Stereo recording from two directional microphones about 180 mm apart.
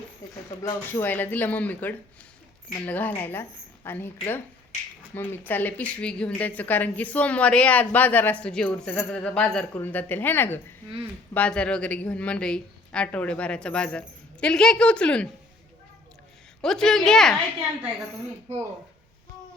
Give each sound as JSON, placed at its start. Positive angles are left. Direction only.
{"t": 0.6, "sound": "a woman's voice", "side_deg": 15}
{"t": 16.6, "sound": "speech", "side_deg": 5}